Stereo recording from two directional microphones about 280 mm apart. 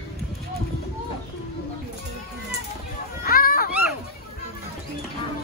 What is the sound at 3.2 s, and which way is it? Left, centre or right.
Children playing, left.